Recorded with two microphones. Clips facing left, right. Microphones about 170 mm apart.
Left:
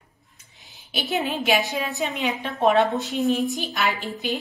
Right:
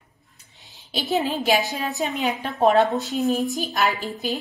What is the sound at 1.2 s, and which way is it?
Speech, 40° right (ahead or behind).